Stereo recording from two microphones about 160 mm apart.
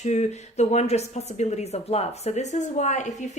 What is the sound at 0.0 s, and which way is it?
A woman's voice, 45° left (ahead or behind).